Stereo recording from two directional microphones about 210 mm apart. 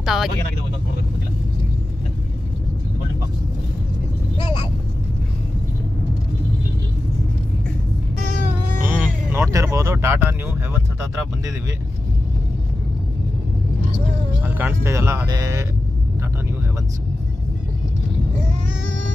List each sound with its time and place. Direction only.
0.0 s speech: centre (ahead or behind)
4.4 s vehicle: 20° left (ahead or behind)
8.8 s speech: 10° right (ahead or behind)
14.4 s speech: 10° right (ahead or behind)